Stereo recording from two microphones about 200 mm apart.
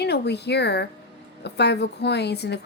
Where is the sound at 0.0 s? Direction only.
55° left (ahead or behind).